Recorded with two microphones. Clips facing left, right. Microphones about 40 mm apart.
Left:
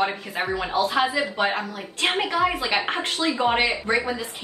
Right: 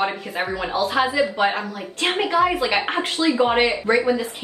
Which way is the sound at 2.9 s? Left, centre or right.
Right.